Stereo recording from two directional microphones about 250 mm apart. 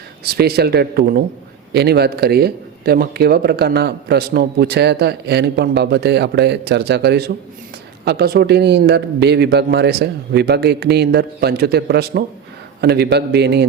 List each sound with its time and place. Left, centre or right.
0.3 s speech: right